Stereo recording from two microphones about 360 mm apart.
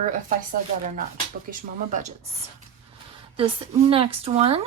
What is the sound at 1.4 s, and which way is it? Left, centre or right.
Speech, right.